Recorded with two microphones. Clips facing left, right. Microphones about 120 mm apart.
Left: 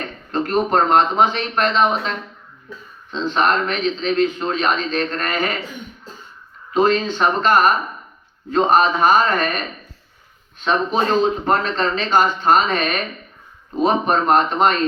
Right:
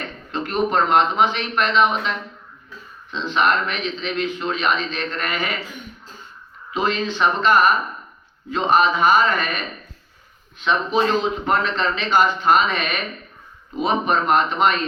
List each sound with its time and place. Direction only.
0.3 s a man's voice: 40° left (ahead or behind)
6.7 s a man's voice: 40° left (ahead or behind)
10.6 s a man's voice: 35° left (ahead or behind)